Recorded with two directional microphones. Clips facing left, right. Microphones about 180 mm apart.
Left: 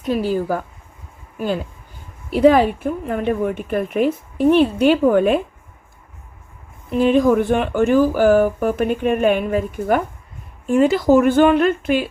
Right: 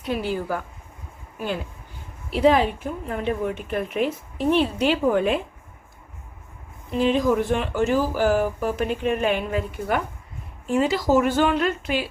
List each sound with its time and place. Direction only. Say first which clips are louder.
0.0 s speech: left 6 dB; 40° left (ahead or behind)
2.3 s speech: left 5 dB; 50° left (ahead or behind)
6.9 s speech: left 6 dB; 55° left (ahead or behind)